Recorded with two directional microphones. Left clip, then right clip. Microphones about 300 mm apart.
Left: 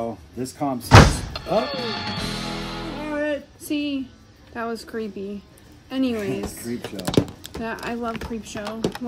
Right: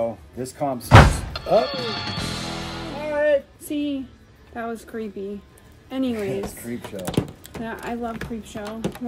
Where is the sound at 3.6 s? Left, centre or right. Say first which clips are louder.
Left 1 dB; left.